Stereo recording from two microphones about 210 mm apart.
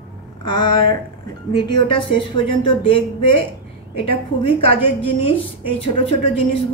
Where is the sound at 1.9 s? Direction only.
25° left (ahead or behind).